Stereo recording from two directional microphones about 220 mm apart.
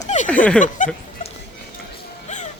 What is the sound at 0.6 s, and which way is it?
Snicker, 35° left (ahead or behind).